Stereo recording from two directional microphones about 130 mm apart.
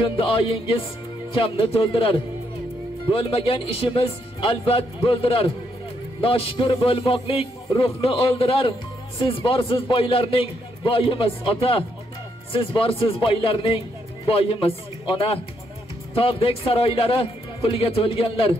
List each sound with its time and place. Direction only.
0.0 s a man's voice: 45° left (ahead or behind)